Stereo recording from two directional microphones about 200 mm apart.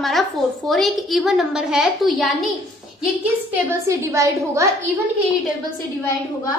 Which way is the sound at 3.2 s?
15° right (ahead or behind).